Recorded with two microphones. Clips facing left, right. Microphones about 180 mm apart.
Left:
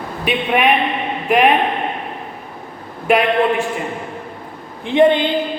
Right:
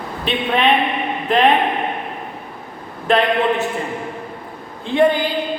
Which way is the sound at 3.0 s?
10° left (ahead or behind).